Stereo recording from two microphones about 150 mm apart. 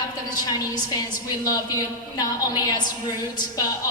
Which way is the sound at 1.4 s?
25° left (ahead or behind).